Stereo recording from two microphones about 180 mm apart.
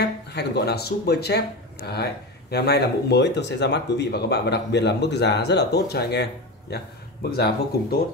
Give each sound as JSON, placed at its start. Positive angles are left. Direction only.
{"t": 0.0, "sound": "speech", "side_deg": 65}